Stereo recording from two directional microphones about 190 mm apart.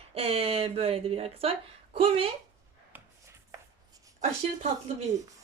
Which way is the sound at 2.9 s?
10° right (ahead or behind).